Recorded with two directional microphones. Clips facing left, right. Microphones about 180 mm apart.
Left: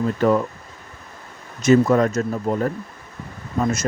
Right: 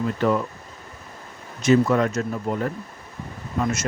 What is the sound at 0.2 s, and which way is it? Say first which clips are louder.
Speech: left 4 dB; 40° left (ahead or behind).